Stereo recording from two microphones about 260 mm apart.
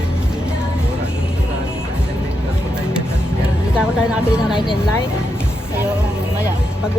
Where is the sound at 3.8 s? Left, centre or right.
Centre.